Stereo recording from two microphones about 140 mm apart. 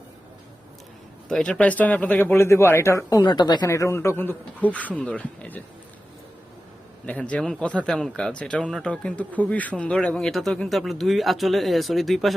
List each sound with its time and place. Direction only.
1.3 s speech: 5° left (ahead or behind)
3.2 s speech: 30° left (ahead or behind); by 5.6 s 10° left (ahead or behind)
7.0 s speech: 10° left (ahead or behind)